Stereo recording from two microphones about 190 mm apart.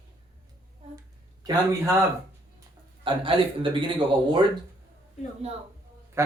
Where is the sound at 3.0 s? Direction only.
25° right (ahead or behind).